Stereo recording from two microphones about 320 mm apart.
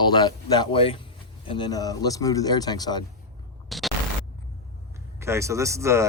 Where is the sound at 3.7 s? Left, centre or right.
Centre.